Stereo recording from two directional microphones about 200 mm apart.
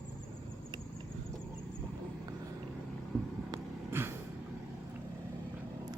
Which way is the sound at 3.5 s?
10° right (ahead or behind).